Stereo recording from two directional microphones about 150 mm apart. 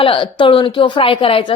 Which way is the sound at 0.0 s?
35° left (ahead or behind).